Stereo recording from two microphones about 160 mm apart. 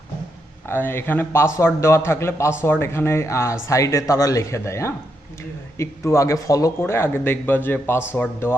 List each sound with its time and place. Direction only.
0.7 s a man's voice: 15° left (ahead or behind)